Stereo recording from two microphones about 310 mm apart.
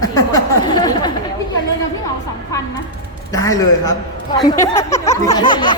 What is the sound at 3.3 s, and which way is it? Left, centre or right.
A woman's voice, centre.